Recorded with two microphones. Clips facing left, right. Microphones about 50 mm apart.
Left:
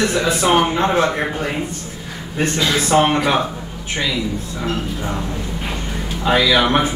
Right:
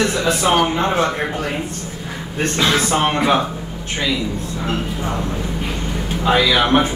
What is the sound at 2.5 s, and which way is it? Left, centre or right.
Speech, right.